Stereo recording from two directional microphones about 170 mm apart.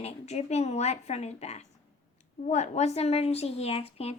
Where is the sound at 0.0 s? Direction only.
40° left (ahead or behind).